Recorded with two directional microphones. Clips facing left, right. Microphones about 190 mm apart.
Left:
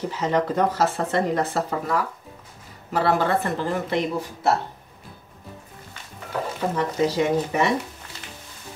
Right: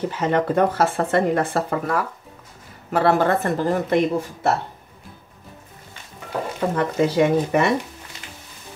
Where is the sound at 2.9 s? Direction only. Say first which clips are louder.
Right 3 dB; 50° right (ahead or behind).